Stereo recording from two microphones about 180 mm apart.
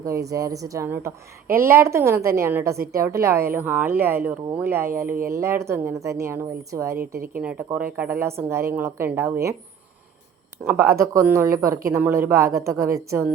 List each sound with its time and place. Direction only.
0.0 s speech: 20° right (ahead or behind)
5.0 s speech: 50° right (ahead or behind)
5.3 s speech: 15° right (ahead or behind)
10.6 s speech: 15° right (ahead or behind)